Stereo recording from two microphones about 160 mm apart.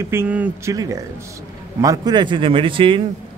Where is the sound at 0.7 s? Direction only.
20° right (ahead or behind).